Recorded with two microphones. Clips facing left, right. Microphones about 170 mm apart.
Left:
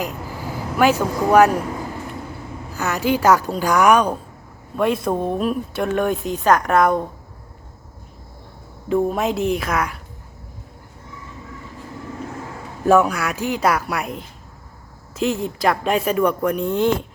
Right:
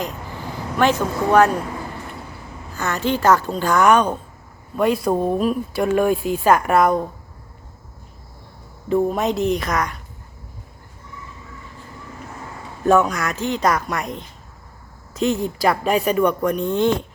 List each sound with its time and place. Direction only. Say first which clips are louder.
0.8 s a woman's voice: left 1 dB; 10° left (ahead or behind)
2.7 s a woman's voice: left 1 dB; 10° left (ahead or behind)
8.9 s speech: even; centre (ahead or behind)
12.8 s a woman's voice: left 1 dB; 10° left (ahead or behind)